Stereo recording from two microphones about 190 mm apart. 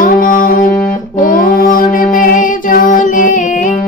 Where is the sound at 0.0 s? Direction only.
45° left (ahead or behind).